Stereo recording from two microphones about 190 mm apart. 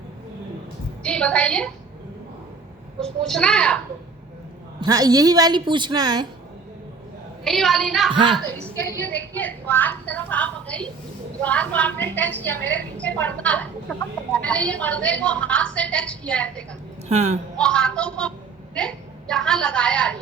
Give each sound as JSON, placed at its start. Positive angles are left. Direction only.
{"t": 1.0, "sound": "a child's voice", "side_deg": 5}
{"t": 3.0, "sound": "a child's voice", "side_deg": 5}
{"t": 4.8, "sound": "a woman's voice", "side_deg": -20}
{"t": 7.4, "sound": "a child's voice", "side_deg": 0}
{"t": 17.1, "sound": "speech", "side_deg": -35}
{"t": 17.6, "sound": "a child's voice", "side_deg": 5}